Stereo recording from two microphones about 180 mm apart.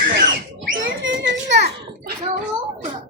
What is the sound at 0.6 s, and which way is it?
Children playing, 80° right.